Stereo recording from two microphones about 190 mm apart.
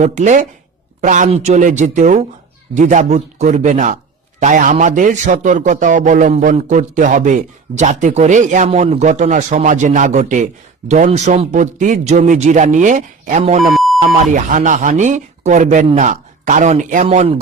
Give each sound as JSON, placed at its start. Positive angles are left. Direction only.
{"t": 0.0, "sound": "a man's voice", "side_deg": -40}
{"t": 13.6, "sound": "beep", "side_deg": 0}
{"t": 14.0, "sound": "a man's voice", "side_deg": -40}